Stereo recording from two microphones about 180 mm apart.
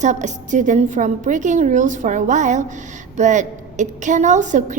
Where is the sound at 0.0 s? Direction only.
40° right (ahead or behind).